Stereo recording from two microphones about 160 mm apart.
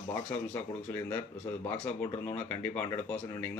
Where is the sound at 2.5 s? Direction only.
10° left (ahead or behind).